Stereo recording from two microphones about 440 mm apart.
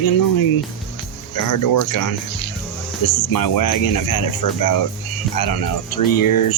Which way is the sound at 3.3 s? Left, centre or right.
Left.